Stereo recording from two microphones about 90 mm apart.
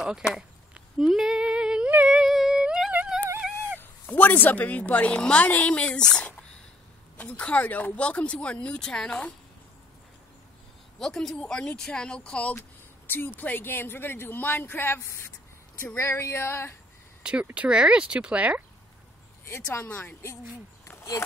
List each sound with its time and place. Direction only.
0.3 s humming: 5° right (ahead or behind)
3.8 s a woman's voice: 20° left (ahead or behind)
11.0 s a woman's voice: 5° left (ahead or behind); by 16.7 s 25° left (ahead or behind)
17.2 s speech: 10° right (ahead or behind)
19.4 s speech: 25° left (ahead or behind)
20.8 s a sound: 30° left (ahead or behind)